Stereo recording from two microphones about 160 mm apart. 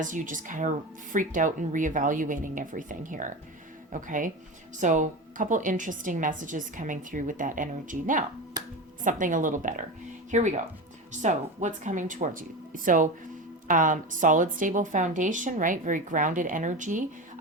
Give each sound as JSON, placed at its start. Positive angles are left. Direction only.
{"t": 0.0, "sound": "a woman's voice", "side_deg": -55}